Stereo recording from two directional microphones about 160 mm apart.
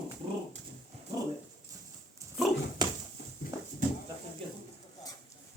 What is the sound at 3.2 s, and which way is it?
Horse, 90° left.